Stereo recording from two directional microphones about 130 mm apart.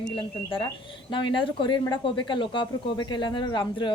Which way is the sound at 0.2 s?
40° left (ahead or behind).